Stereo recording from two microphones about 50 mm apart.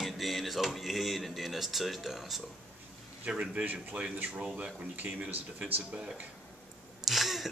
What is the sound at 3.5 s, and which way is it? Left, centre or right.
Speech, right.